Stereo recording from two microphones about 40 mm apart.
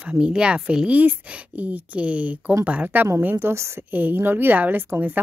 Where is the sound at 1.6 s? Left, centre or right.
Right.